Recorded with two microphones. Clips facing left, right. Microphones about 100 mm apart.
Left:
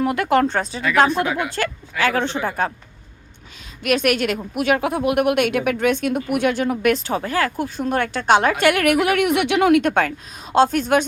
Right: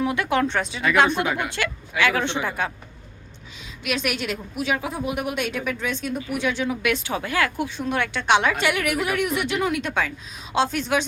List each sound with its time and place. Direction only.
0.0 s a woman's voice: 45° left (ahead or behind)
1.1 s a woman's voice: centre (ahead or behind)
1.5 s a woman's voice: 40° left (ahead or behind)
3.8 s speech: 55° left (ahead or behind)